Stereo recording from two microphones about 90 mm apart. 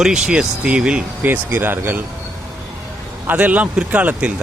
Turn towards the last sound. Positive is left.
turn(degrees=-15)  # may be behind; listen again after turning